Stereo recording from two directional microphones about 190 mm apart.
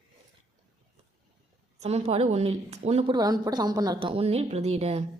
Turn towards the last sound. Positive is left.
turn(degrees=-35)  # may be behind; listen again after turning